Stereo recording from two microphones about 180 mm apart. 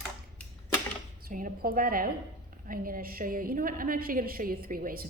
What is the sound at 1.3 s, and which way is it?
A woman's voice, 50° right (ahead or behind).